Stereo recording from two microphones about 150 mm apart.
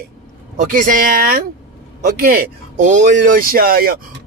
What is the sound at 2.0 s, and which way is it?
Speech, 85° right.